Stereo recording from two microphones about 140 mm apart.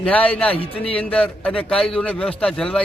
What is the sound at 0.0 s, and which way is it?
A man's voice, 10° left (ahead or behind).